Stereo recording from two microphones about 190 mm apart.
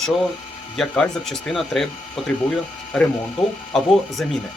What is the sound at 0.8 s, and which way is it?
Speech, centre (ahead or behind).